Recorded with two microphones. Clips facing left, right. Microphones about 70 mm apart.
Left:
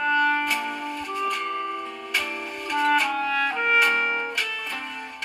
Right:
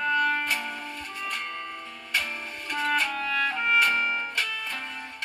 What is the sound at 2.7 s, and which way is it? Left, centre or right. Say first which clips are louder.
Music: left 5 dB; left.